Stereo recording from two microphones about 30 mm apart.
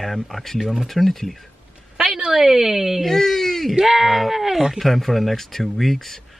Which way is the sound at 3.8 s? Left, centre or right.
Centre.